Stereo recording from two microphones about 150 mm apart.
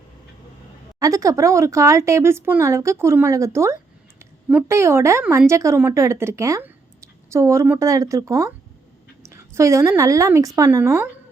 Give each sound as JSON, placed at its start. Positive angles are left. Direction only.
{"t": 0.9, "sound": "speech", "side_deg": -20}